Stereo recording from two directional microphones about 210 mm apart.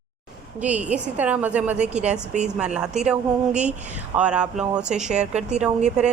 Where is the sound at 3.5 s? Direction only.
35° right (ahead or behind).